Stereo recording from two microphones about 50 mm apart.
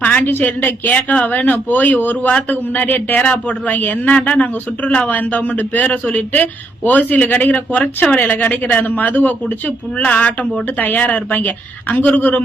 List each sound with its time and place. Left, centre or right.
0.0 s speech: left